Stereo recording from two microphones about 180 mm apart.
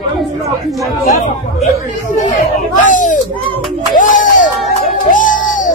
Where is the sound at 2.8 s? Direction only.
45° left (ahead or behind).